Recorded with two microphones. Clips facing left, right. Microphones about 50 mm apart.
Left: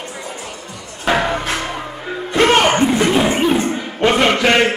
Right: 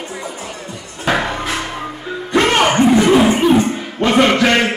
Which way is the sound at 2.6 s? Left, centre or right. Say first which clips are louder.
Right 2 dB; centre.